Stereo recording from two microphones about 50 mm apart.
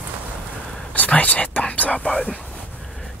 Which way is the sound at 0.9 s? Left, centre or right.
Left.